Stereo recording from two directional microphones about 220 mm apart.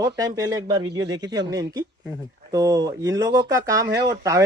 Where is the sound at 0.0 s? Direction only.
15° right (ahead or behind).